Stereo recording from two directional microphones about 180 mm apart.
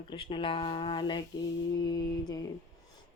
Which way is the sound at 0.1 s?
30° left (ahead or behind).